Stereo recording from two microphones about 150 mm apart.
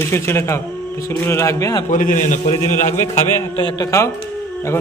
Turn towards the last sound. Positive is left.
turn(degrees=20)  # may be behind; listen again after turning